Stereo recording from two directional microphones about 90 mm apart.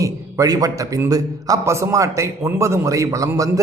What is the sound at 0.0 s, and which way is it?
A man's voice, 40° right (ahead or behind).